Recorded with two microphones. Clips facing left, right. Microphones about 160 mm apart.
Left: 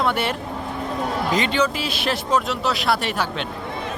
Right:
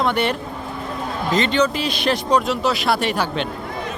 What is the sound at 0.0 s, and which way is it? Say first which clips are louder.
Speech: right 2 dB; 5° left (ahead or behind).